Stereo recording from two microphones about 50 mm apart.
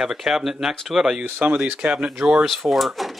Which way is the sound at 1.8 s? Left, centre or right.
Centre.